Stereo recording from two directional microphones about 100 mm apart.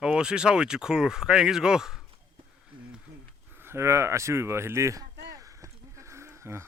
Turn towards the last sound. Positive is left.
turn(degrees=-25)  # may be behind; listen again after turning